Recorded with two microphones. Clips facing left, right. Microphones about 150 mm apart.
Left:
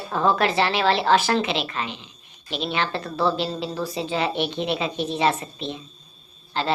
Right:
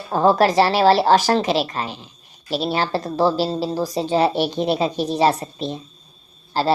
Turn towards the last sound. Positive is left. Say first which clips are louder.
# right 5 dB
turn(degrees=-35)  # may be behind; listen again after turning